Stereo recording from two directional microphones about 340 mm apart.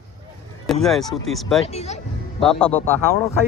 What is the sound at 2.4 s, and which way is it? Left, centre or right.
Speech, centre.